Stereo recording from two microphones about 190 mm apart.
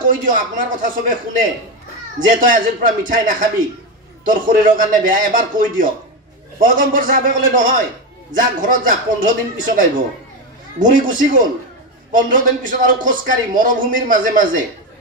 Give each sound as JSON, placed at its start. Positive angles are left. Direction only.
{"t": 0.0, "sound": "speech", "side_deg": -45}